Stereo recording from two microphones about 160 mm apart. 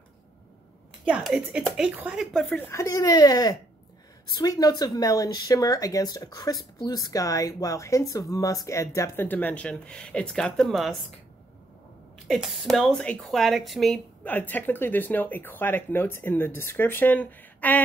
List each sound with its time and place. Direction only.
1.0 s speech: 5° right (ahead or behind)
2.6 s speech: 15° left (ahead or behind); by 11.0 s centre (ahead or behind)
12.3 s speech: centre (ahead or behind)